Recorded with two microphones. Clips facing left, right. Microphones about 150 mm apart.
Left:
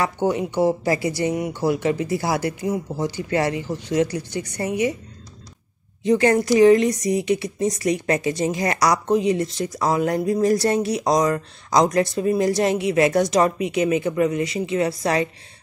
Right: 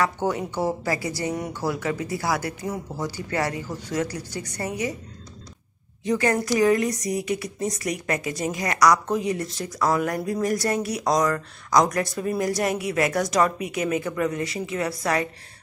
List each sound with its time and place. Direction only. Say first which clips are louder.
0.0 s speech: left 3 dB; 20° left (ahead or behind)
6.0 s speech: left 5 dB; 25° left (ahead or behind)